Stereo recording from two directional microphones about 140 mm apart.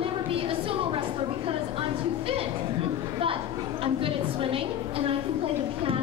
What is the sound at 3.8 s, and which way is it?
A woman's voice, 40° right (ahead or behind).